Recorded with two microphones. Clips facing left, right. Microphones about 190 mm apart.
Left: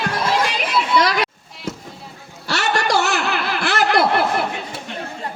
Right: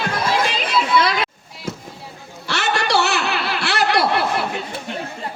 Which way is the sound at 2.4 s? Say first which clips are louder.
Left 1 dB; 40° left (ahead or behind).